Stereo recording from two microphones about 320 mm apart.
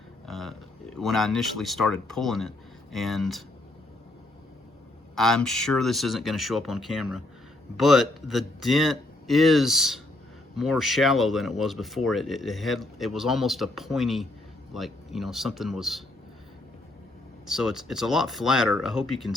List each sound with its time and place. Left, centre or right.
0.3 s a sound: centre
0.9 s speech: centre
5.1 s speech: centre
17.4 s speech: centre